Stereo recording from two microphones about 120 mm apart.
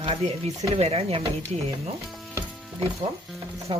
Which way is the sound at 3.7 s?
45° right (ahead or behind).